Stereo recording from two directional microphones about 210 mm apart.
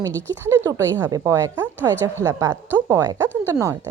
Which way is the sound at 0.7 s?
15° right (ahead or behind).